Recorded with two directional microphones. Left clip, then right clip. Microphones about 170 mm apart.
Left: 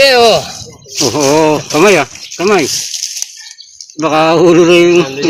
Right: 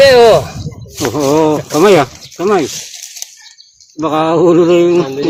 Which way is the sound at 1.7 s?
10° left (ahead or behind).